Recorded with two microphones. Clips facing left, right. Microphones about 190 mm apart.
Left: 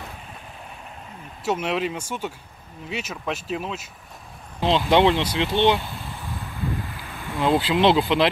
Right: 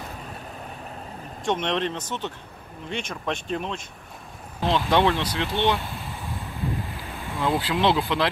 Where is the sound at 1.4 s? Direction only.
5° left (ahead or behind).